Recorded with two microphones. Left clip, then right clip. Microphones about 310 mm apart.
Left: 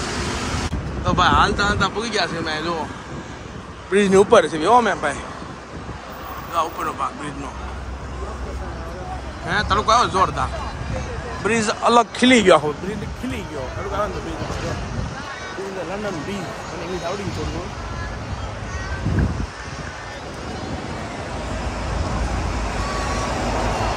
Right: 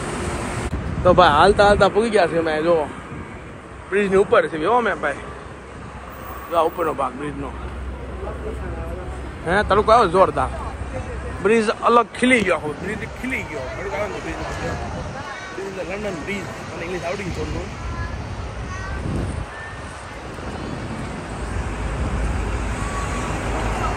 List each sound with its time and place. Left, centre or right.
1.0 s speech: centre
3.9 s speech: centre
6.5 s speech: centre
9.5 s speech: centre; by 12.6 s left